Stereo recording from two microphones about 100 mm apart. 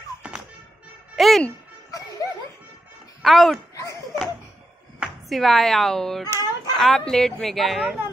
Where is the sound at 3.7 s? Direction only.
30° left (ahead or behind).